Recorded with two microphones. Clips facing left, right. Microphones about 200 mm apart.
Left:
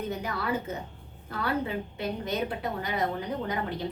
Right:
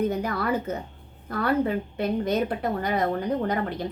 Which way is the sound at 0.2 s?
50° right (ahead or behind).